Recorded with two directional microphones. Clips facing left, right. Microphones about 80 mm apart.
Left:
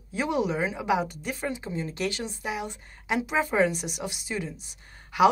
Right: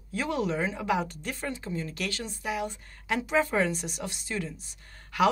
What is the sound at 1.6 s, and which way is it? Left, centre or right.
Speech, left.